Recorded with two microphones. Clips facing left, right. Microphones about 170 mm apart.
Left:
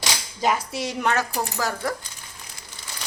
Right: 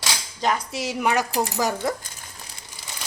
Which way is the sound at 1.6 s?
20° right (ahead or behind).